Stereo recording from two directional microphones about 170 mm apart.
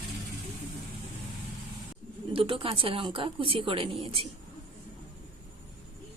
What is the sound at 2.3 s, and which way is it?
A woman's voice, 30° right (ahead or behind).